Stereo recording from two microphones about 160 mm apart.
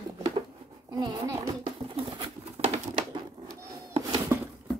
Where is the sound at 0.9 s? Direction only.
25° right (ahead or behind).